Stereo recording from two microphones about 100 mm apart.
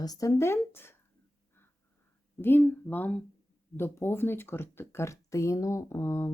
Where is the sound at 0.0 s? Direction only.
35° left (ahead or behind).